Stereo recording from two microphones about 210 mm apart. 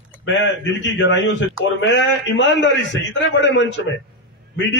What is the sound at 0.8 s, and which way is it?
A man's voice, 60° left (ahead or behind).